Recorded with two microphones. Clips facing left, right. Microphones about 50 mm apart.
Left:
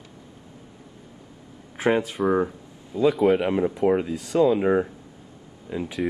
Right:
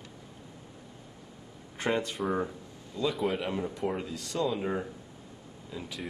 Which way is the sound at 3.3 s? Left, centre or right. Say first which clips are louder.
Left 10 dB; left.